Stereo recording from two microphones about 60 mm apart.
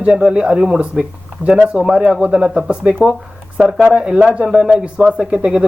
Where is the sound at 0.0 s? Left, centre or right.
Centre.